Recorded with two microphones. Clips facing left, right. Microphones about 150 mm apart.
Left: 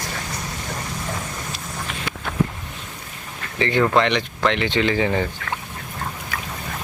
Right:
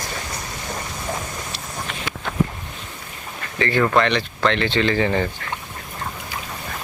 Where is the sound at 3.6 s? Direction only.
20° left (ahead or behind).